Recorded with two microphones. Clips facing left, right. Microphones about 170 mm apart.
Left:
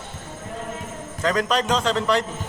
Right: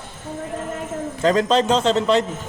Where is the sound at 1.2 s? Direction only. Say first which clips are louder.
Right 5 dB; 25° right (ahead or behind).